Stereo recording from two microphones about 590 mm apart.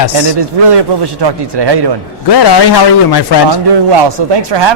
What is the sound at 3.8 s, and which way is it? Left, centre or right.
Speech, right.